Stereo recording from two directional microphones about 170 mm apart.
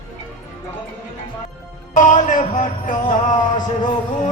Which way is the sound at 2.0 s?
45° left (ahead or behind).